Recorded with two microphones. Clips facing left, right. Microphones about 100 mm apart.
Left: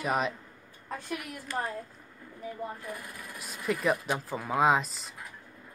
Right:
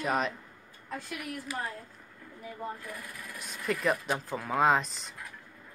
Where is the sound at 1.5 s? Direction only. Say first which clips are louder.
Left 5 dB; 5° right (ahead or behind).